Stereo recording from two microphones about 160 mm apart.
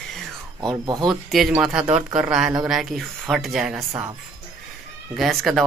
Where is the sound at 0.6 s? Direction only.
25° right (ahead or behind).